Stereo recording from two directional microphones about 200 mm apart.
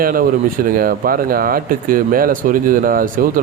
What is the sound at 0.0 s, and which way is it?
Speech, 45° right (ahead or behind).